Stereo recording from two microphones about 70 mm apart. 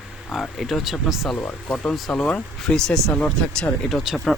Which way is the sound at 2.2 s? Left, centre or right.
Centre.